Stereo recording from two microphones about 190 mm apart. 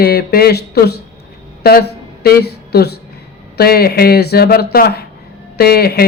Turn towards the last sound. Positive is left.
turn(degrees=55)  # may be behind; listen again after turning